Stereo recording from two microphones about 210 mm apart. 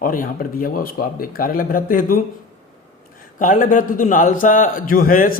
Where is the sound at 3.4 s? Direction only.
40° left (ahead or behind).